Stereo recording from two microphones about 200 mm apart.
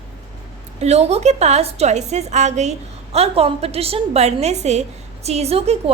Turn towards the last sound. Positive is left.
turn(degrees=-30)  # may be behind; listen again after turning